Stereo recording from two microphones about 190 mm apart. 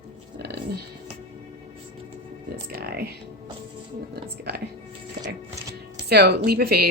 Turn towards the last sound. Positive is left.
turn(degrees=-55)  # may be behind; listen again after turning